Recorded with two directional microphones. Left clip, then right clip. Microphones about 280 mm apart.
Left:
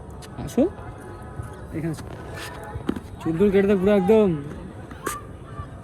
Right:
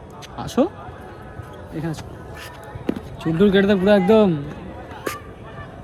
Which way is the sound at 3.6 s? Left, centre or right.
Right.